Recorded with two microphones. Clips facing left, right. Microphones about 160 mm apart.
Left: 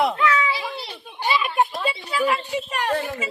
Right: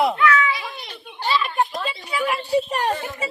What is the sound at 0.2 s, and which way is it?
Children playing, 30° left (ahead or behind).